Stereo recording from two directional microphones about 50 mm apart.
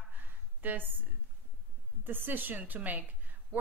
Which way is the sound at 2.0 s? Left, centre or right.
Right.